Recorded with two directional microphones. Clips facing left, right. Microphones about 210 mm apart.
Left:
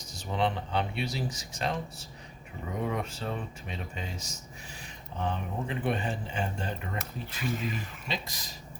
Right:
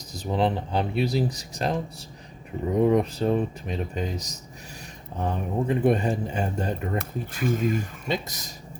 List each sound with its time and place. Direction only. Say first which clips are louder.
0.1 s speech: right 6 dB; 35° right (ahead or behind)